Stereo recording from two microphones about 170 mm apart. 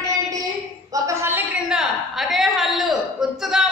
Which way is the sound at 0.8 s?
20° right (ahead or behind).